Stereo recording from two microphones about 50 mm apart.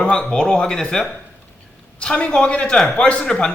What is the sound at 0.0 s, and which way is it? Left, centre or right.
A man's voice, centre.